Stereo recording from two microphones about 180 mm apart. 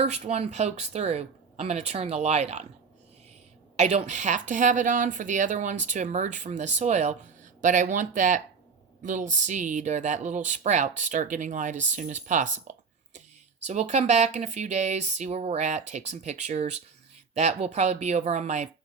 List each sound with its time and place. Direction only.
0.0 s speech: 40° right (ahead or behind)
3.8 s speech: 40° right (ahead or behind)